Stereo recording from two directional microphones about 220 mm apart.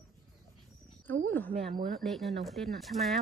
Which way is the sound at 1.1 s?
10° left (ahead or behind).